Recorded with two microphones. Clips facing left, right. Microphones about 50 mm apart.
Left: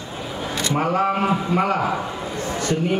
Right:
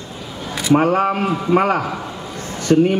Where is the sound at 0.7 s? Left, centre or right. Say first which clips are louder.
Right 6 dB; right.